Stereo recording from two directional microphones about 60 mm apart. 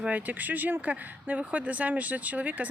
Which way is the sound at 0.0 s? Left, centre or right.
Right.